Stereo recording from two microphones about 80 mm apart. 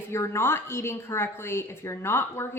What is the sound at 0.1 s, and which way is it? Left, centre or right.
A woman's voice, left.